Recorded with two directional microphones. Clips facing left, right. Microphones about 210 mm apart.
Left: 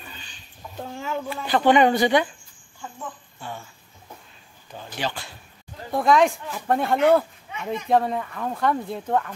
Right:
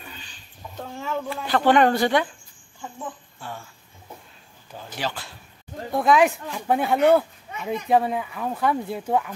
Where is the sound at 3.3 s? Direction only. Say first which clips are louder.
Left 1 dB; centre (ahead or behind).